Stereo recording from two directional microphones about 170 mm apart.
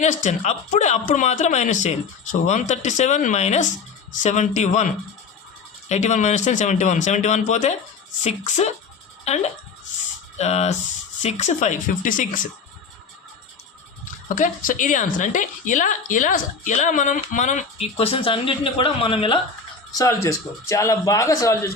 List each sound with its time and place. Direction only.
0.0 s a woman's voice: 45° left (ahead or behind)
5.9 s a woman's voice: 45° left (ahead or behind)
14.3 s a woman's voice: 50° left (ahead or behind); by 19.4 s 30° left (ahead or behind)
19.9 s speech: 20° left (ahead or behind)